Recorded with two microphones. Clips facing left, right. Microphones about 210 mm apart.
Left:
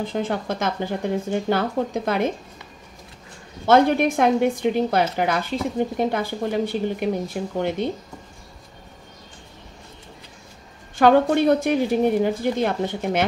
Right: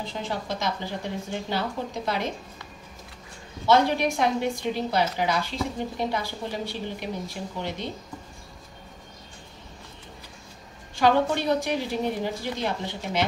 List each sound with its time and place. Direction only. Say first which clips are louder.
0.0 s a woman's voice: left 7 dB; 50° left (ahead or behind)
3.6 s a woman's voice: left 5 dB; 50° left (ahead or behind)
11.0 s a woman's voice: left 6 dB; 55° left (ahead or behind)